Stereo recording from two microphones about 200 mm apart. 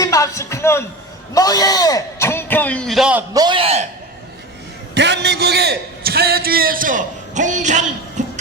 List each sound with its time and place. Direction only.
0.0 s a man's voice: 15° left (ahead or behind); by 3.2 s 5° right (ahead or behind)
3.3 s a man's voice: 25° right (ahead or behind)
4.9 s a man's voice: 60° right (ahead or behind); by 8.2 s 35° right (ahead or behind)